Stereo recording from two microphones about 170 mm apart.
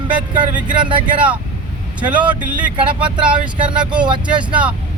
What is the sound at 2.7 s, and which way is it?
Speech, 30° right (ahead or behind).